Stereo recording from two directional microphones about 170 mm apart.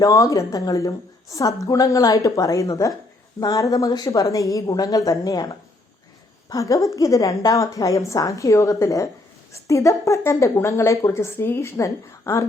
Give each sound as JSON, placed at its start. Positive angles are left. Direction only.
{"t": 0.0, "sound": "a woman's voice", "side_deg": 20}